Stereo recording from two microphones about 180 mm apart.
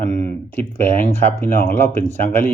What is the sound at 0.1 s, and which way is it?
Speech, 40° right (ahead or behind).